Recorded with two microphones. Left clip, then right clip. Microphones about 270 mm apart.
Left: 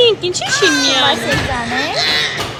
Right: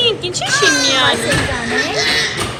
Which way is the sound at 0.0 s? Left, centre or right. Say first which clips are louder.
Left 3 dB; left.